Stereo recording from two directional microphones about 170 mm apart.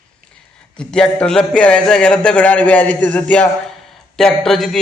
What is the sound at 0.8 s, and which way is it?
A man's voice, 5° left (ahead or behind).